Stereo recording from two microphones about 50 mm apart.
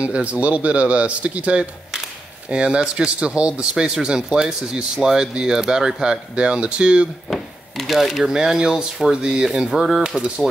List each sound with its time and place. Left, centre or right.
0.0 s speech: right
7.3 s speech: centre